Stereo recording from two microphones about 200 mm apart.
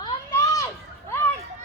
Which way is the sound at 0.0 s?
15° left (ahead or behind).